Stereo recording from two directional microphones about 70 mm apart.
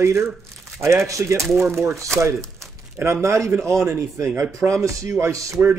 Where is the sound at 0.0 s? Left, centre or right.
Right.